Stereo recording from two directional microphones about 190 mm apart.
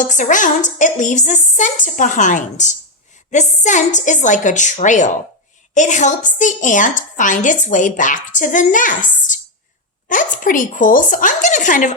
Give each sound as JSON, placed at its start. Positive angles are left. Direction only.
{"t": 0.0, "sound": "a woman's voice", "side_deg": 40}